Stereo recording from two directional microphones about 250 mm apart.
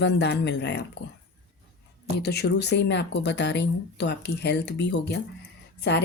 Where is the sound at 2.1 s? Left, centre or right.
Left.